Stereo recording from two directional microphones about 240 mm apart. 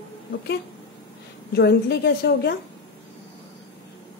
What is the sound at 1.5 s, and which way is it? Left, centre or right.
A woman's voice, left.